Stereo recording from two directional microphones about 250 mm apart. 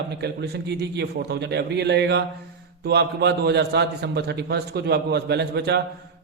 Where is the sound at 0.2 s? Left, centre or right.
Right.